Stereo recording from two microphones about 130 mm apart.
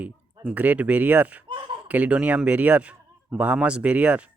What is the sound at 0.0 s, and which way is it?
A man's voice, 10° right (ahead or behind).